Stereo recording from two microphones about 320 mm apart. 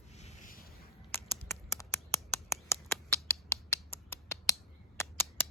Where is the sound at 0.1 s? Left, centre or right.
Left.